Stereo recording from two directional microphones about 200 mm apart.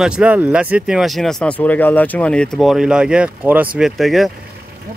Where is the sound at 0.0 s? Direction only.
5° right (ahead or behind).